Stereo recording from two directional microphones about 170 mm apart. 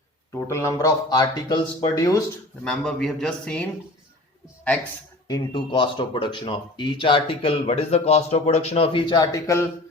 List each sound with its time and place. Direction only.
0.3 s speech: 15° left (ahead or behind)
2.6 s a man's voice: 5° left (ahead or behind)
5.3 s speech: 25° left (ahead or behind)